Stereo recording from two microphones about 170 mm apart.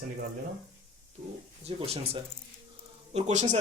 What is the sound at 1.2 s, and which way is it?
Speech, 45° right (ahead or behind).